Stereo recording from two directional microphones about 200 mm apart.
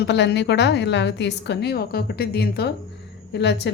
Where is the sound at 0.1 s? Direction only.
60° left (ahead or behind).